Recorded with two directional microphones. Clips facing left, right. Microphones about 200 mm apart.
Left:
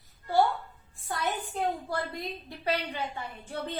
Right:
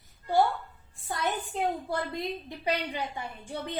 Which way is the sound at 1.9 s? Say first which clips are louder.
Right 2 dB; 20° right (ahead or behind).